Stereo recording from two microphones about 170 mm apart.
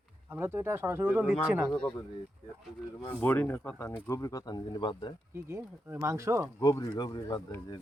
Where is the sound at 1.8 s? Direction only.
25° left (ahead or behind).